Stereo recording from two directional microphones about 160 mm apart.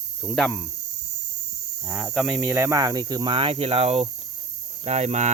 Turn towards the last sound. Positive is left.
turn(degrees=-45)  # may be behind; listen again after turning